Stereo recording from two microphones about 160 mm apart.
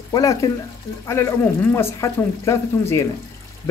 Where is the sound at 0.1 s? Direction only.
20° left (ahead or behind).